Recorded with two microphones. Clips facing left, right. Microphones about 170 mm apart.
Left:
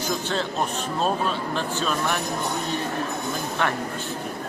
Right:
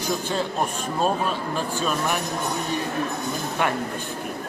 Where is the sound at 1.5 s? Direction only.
10° right (ahead or behind).